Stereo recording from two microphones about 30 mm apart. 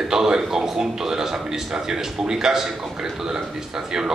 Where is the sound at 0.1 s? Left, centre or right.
Centre.